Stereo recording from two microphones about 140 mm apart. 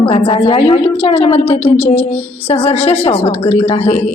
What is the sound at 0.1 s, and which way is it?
Speech, 45° left (ahead or behind).